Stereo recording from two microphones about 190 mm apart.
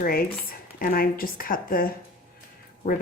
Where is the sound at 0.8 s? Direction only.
50° left (ahead or behind).